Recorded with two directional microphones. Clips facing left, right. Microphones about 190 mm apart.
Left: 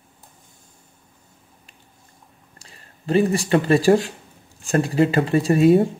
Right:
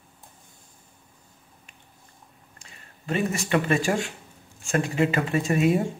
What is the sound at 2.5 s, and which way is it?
Speech, 35° left (ahead or behind).